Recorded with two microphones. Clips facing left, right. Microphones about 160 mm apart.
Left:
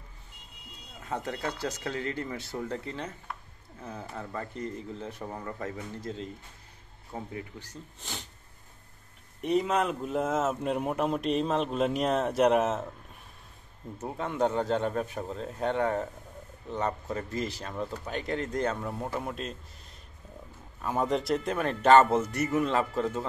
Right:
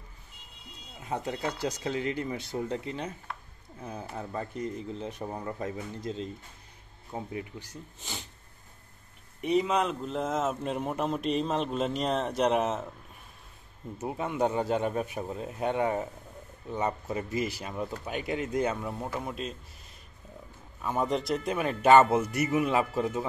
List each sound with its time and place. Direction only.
1.0 s speech: 15° right (ahead or behind)
8.0 s speech: centre (ahead or behind)
9.4 s speech: centre (ahead or behind)
14.0 s speech: 10° right (ahead or behind)
20.8 s speech: centre (ahead or behind)